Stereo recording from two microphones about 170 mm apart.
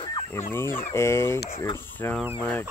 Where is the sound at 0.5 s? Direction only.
15° left (ahead or behind).